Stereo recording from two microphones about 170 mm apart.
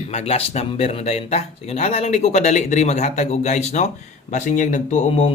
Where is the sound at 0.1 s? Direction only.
40° left (ahead or behind).